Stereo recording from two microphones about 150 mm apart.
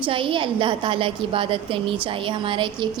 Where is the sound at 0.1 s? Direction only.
35° right (ahead or behind).